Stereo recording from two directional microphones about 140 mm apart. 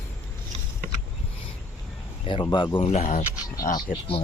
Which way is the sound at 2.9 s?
55° left (ahead or behind).